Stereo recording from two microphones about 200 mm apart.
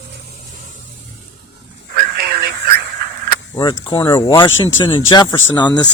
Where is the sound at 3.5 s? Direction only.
20° left (ahead or behind).